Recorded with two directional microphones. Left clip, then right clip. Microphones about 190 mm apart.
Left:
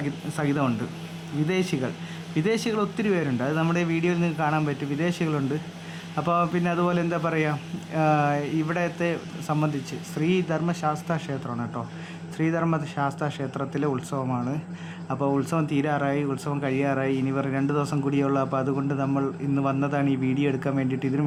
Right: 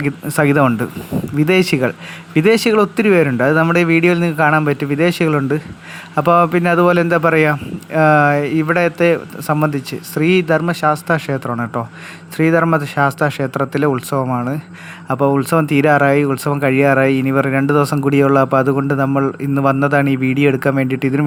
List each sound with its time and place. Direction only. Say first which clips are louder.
0.0 s speech: right 13 dB; 35° right (ahead or behind)